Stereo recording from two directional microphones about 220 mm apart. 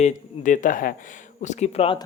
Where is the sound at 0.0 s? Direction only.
35° left (ahead or behind).